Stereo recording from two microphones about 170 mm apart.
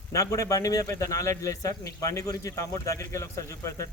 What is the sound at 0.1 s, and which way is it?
A man's voice, 20° left (ahead or behind).